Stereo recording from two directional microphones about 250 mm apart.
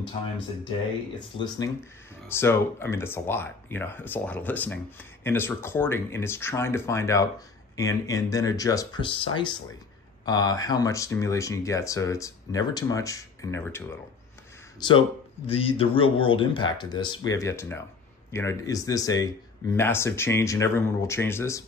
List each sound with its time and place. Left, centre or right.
1.4 s speech: centre
14.8 s speech: left